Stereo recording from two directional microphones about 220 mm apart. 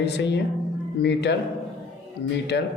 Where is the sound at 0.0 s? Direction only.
50° left (ahead or behind).